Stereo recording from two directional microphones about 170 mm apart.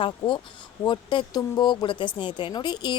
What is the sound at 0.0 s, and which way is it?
Speech, 30° left (ahead or behind).